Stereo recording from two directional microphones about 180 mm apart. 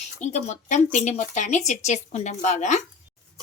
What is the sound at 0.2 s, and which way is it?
A woman's voice, 40° left (ahead or behind).